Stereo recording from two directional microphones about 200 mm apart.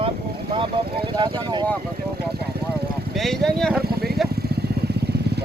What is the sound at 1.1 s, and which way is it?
Speech, 20° right (ahead or behind).